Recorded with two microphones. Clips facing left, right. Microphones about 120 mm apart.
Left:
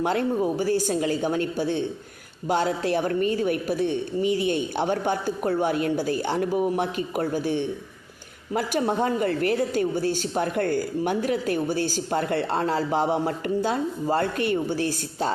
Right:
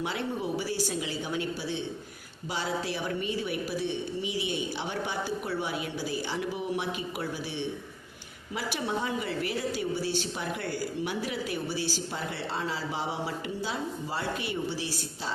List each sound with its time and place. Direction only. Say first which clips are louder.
0.0 s a woman's voice: left 9 dB; 50° left (ahead or behind)